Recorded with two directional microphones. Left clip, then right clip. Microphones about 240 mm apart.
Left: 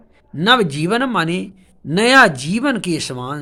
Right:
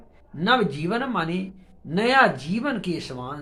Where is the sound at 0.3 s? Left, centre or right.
Left.